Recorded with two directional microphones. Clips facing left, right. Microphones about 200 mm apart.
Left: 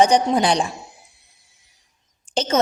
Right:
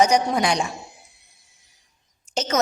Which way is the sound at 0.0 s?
30° left (ahead or behind).